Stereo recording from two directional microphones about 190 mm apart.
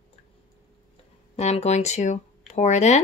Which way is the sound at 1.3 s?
35° left (ahead or behind).